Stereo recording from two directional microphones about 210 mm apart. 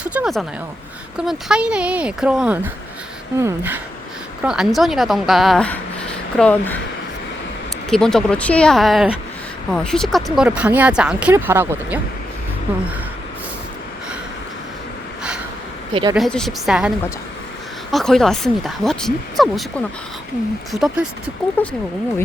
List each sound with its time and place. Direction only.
0.0 s a woman's voice: 5° right (ahead or behind)
7.9 s speech: centre (ahead or behind)
15.9 s speech: 25° right (ahead or behind)
16.1 s speech: centre (ahead or behind)
17.9 s speech: centre (ahead or behind)
20.8 s speech: 5° right (ahead or behind)
21.6 s speech: 10° left (ahead or behind)